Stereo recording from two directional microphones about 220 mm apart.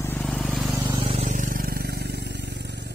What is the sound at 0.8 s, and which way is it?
Vehicle, 25° right (ahead or behind).